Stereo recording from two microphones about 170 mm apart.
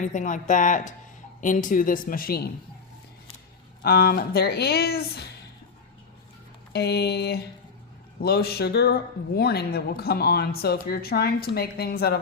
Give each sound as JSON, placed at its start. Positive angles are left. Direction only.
{"t": 0.0, "sound": "speech", "side_deg": 50}
{"t": 3.8, "sound": "speech", "side_deg": 65}
{"t": 6.7, "sound": "a woman's voice", "side_deg": 75}